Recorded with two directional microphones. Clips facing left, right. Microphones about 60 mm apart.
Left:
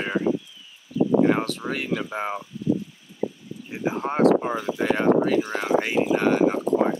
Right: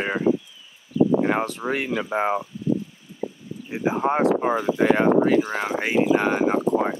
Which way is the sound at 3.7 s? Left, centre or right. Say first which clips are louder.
Right 4 dB; centre.